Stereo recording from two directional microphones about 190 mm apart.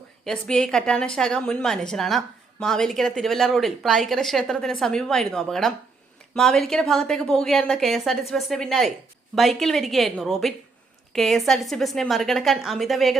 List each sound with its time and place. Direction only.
0.3 s a woman's voice: 5° left (ahead or behind)